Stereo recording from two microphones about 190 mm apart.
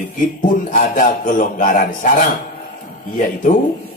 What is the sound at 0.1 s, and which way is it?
A man's voice, 45° left (ahead or behind).